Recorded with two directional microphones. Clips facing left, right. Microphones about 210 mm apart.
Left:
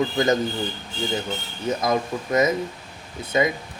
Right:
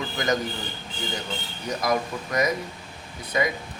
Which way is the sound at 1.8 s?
25° left (ahead or behind).